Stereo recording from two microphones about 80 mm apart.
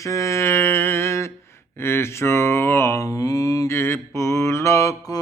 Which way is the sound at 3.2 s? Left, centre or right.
Left.